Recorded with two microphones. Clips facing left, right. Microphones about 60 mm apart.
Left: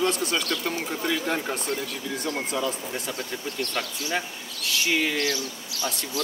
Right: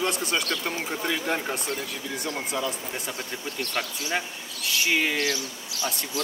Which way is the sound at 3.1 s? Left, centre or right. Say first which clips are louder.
Left 2 dB; centre.